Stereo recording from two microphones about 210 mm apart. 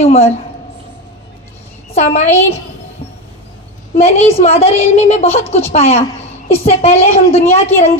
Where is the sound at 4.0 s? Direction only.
30° left (ahead or behind).